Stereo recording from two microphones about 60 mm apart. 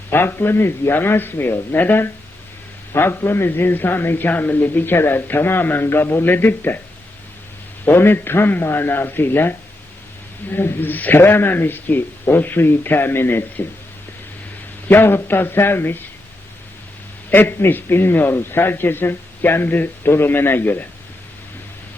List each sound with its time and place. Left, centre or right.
0.1 s a man's voice: left
7.9 s a man's voice: left
14.8 s a man's voice: left
17.3 s a man's voice: left